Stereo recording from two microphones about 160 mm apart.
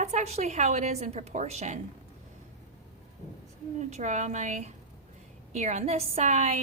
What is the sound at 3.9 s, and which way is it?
A woman's voice, 45° right (ahead or behind).